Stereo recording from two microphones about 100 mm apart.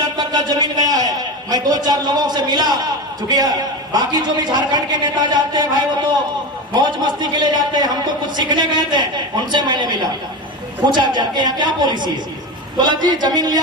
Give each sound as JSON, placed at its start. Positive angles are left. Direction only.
{"t": 0.2, "sound": "a man's voice", "side_deg": -45}
{"t": 6.7, "sound": "a man's voice", "side_deg": -45}